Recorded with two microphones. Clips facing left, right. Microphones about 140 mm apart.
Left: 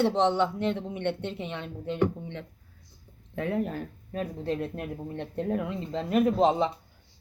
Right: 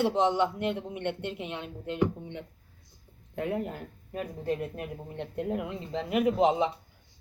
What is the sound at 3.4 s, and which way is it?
A woman's voice, 15° right (ahead or behind).